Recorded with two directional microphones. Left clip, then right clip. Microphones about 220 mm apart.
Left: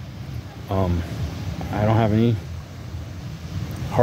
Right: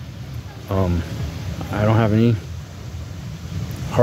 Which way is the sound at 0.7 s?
20° right (ahead or behind).